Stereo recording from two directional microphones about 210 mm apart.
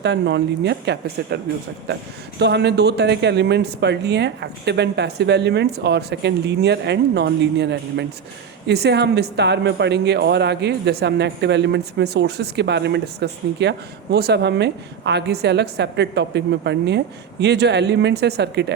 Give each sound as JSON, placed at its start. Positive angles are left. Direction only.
{"t": 0.0, "sound": "a woman's voice", "side_deg": -55}
{"t": 2.4, "sound": "a woman's voice", "side_deg": -55}